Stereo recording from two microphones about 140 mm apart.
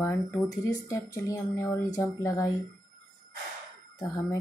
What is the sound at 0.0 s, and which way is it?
Speech, 20° left (ahead or behind).